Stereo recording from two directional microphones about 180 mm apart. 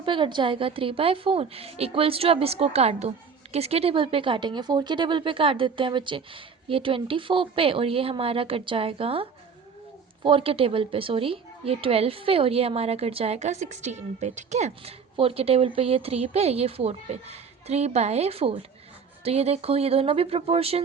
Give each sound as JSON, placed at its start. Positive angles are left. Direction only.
{"t": 0.0, "sound": "speech", "side_deg": -30}
{"t": 10.2, "sound": "speech", "side_deg": -30}